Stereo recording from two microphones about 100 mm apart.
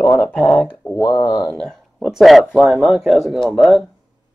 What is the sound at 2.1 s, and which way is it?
Speech, centre (ahead or behind).